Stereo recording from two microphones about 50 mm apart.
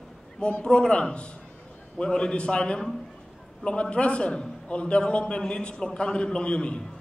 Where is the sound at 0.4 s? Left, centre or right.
Left.